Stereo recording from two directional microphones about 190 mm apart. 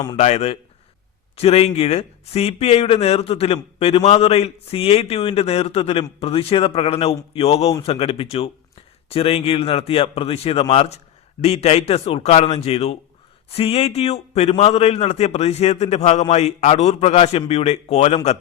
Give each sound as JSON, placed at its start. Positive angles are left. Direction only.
{"t": 0.2, "sound": "a man's voice", "side_deg": 35}